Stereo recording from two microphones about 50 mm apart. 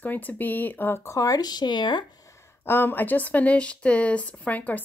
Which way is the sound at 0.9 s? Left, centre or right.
Left.